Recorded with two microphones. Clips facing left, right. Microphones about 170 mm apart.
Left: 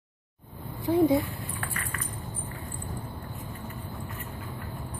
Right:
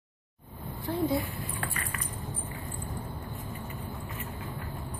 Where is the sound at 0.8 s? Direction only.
15° left (ahead or behind).